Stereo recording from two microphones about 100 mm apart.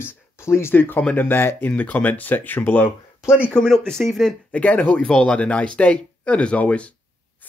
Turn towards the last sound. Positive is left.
turn(degrees=15)  # may be behind; listen again after turning